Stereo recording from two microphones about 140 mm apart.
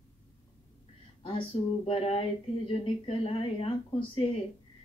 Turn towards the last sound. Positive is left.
turn(degrees=40)  # may be behind; listen again after turning